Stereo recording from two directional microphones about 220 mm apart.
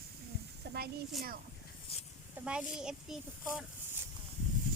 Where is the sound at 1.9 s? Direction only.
25° left (ahead or behind).